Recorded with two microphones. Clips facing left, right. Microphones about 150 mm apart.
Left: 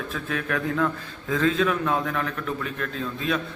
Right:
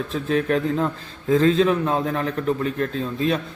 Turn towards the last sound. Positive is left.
turn(degrees=-35)  # may be behind; listen again after turning